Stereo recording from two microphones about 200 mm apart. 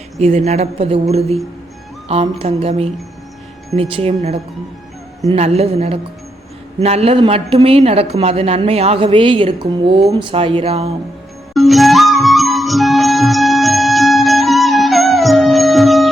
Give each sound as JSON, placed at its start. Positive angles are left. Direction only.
{"t": 0.2, "sound": "a woman's voice", "side_deg": -30}
{"t": 2.0, "sound": "a woman's voice", "side_deg": -30}
{"t": 11.5, "sound": "music", "side_deg": 0}